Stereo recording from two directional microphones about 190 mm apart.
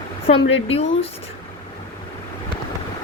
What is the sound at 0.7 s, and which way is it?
Speech, 30° left (ahead or behind).